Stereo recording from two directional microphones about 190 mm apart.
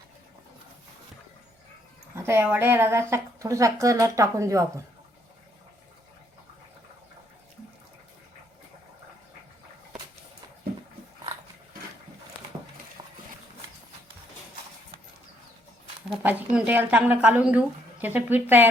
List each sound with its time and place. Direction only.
2.1 s speech: 15° right (ahead or behind)
13.0 s a sound: 25° right (ahead or behind)
16.0 s speech: 10° right (ahead or behind)